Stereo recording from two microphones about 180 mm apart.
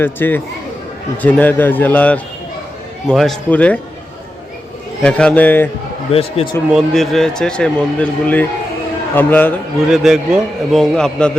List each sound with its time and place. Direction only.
0.0 s a man's voice: 10° left (ahead or behind)
5.0 s a man's voice: 5° left (ahead or behind)
6.1 s speech: 35° left (ahead or behind)
6.7 s a man's voice: centre (ahead or behind)
9.8 s a man's voice: centre (ahead or behind)